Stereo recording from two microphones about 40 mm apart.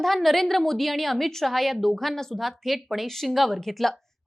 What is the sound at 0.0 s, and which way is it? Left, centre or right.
A woman's voice, centre.